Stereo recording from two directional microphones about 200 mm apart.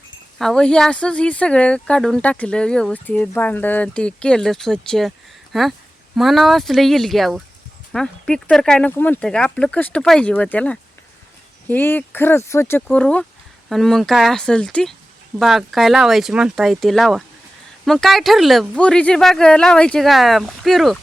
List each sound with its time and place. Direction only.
0.3 s speech: 5° left (ahead or behind)